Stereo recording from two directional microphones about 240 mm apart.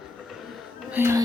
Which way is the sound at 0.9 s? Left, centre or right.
Centre.